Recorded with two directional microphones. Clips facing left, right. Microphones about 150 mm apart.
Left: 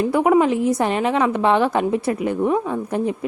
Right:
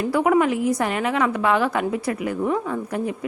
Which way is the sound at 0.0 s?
25° left (ahead or behind).